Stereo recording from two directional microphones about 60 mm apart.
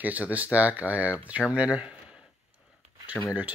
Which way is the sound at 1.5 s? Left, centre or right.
Centre.